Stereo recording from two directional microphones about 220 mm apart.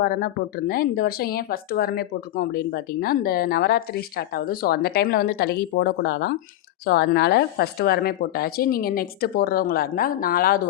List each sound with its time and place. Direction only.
0.0 s speech: 45° left (ahead or behind)